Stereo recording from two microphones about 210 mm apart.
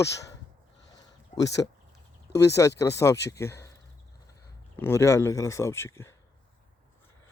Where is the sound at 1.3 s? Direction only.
15° left (ahead or behind).